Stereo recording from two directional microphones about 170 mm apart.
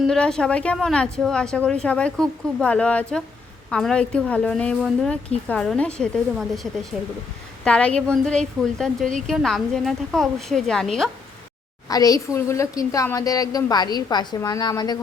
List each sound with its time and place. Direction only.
0.1 s a woman's voice: 5° left (ahead or behind)
11.9 s a woman's voice: 20° left (ahead or behind)